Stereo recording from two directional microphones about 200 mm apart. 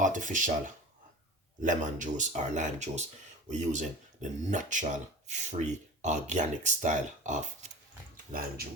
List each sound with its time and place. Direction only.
0.0 s speech: 40° right (ahead or behind)
1.6 s speech: 40° right (ahead or behind)